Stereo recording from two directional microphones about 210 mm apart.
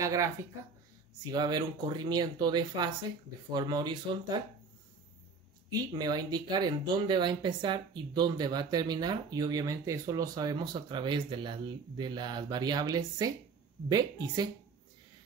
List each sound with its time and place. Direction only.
0.0 s speech: 15° right (ahead or behind)
5.7 s speech: 20° right (ahead or behind)